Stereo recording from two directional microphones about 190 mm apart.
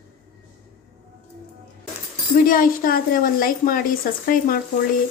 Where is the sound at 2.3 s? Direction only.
45° left (ahead or behind).